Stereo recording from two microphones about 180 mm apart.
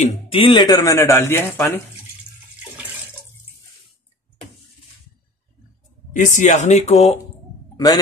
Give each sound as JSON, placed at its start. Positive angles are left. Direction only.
{"t": 0.0, "sound": "speech", "side_deg": 30}
{"t": 6.1, "sound": "speech", "side_deg": 45}
{"t": 7.7, "sound": "a sound", "side_deg": 20}